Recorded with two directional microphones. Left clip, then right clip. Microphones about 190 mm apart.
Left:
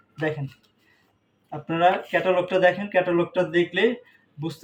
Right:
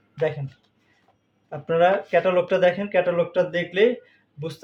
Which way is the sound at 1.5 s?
45° right (ahead or behind).